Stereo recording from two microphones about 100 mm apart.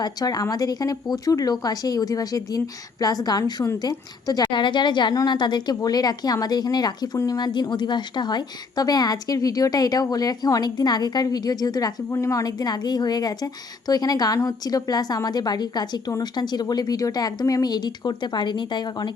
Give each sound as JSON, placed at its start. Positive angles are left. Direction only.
{"t": 0.0, "sound": "a woman's voice", "side_deg": 40}